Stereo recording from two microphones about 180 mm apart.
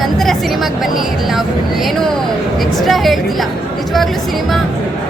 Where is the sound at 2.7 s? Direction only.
Centre (ahead or behind).